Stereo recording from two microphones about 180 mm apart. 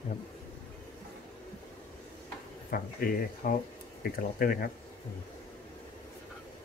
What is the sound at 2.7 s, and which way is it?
Speech, 50° left (ahead or behind).